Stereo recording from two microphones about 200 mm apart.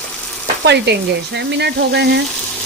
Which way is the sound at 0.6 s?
60° right (ahead or behind).